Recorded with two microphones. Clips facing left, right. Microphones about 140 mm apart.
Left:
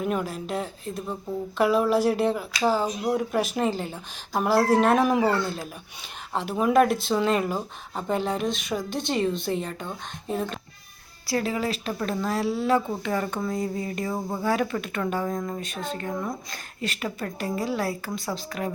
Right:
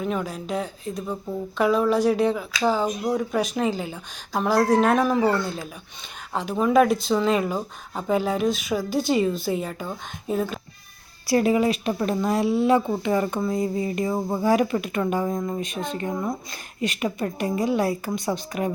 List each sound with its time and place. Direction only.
0.0 s speech: 5° left (ahead or behind)
11.3 s speech: 20° right (ahead or behind)